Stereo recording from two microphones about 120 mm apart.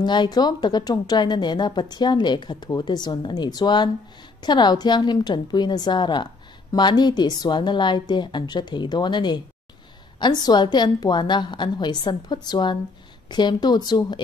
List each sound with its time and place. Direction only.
0.0 s a woman's voice: 40° left (ahead or behind)